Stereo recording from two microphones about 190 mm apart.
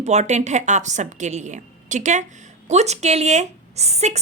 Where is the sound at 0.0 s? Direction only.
35° right (ahead or behind).